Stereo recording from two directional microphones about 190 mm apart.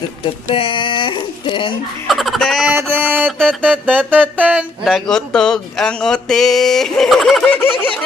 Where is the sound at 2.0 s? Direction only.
Centre (ahead or behind).